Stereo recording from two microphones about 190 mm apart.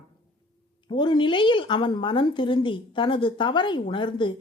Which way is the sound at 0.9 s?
25° left (ahead or behind).